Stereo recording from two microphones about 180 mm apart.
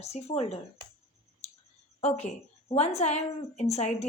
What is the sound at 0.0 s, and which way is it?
Speech, 35° left (ahead or behind).